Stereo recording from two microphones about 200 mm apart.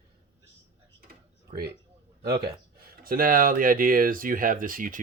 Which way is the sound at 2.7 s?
50° right (ahead or behind).